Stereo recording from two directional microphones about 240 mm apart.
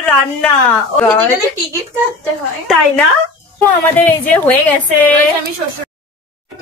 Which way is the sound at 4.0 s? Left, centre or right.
Centre.